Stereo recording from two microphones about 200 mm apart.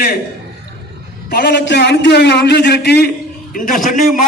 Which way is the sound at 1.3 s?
55° left (ahead or behind).